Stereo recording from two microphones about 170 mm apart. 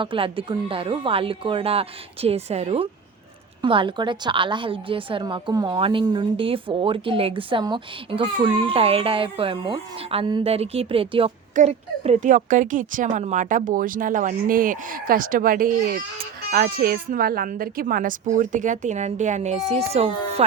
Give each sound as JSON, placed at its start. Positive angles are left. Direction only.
{"t": 0.0, "sound": "a woman's voice", "side_deg": -30}